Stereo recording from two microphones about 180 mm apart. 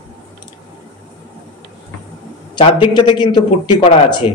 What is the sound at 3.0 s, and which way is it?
A man's voice, 25° left (ahead or behind).